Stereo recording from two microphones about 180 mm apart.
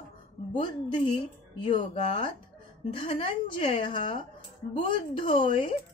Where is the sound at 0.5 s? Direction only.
30° left (ahead or behind).